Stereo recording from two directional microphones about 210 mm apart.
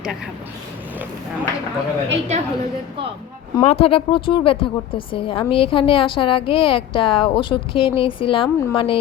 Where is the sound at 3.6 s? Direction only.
30° left (ahead or behind).